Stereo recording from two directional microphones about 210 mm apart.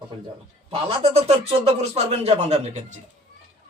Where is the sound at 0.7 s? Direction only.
25° right (ahead or behind).